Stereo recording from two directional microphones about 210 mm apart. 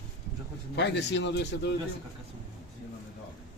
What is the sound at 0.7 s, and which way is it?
A man's voice, 55° left (ahead or behind).